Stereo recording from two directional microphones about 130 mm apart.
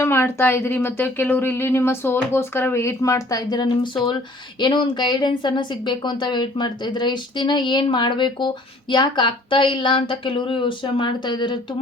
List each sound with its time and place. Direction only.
0.0 s a woman's voice: 20° left (ahead or behind); by 11.6 s 35° left (ahead or behind)